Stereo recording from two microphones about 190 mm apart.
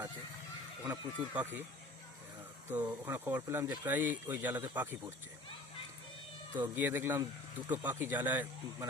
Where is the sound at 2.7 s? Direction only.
20° right (ahead or behind).